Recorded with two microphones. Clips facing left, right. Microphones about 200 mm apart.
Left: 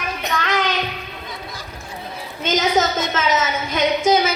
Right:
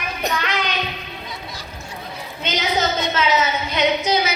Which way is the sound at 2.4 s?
45° left (ahead or behind).